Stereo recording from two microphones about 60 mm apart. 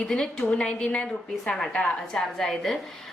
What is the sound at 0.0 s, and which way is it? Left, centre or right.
A woman's voice, centre.